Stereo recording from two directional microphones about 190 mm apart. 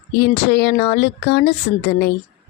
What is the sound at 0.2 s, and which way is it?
Speech, 60° left (ahead or behind).